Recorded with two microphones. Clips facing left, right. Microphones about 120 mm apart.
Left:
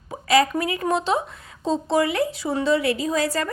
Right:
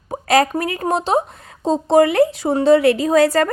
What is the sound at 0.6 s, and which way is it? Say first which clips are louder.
A woman's voice: right 3 dB; 45° right (ahead or behind).